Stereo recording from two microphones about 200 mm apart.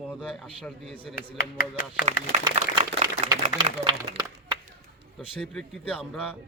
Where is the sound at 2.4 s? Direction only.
25° right (ahead or behind).